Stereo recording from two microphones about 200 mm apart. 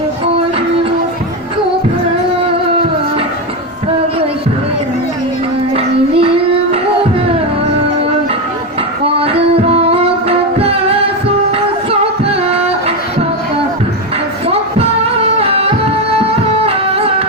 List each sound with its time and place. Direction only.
5.7 s child singing: 30° right (ahead or behind)
9.1 s music: 30° right (ahead or behind)
14.4 s a sound: 30° right (ahead or behind)
15.4 s music: 30° right (ahead or behind)